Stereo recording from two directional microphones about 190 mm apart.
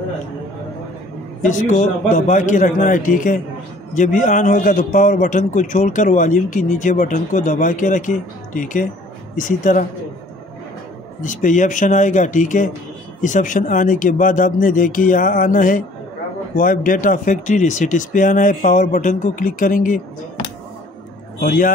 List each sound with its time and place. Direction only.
1.4 s a man's voice: 40° left (ahead or behind)
11.1 s a man's voice: 45° left (ahead or behind)
21.4 s a man's voice: 45° left (ahead or behind)